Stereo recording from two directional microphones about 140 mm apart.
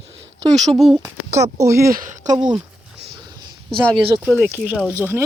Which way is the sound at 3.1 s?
30° right (ahead or behind).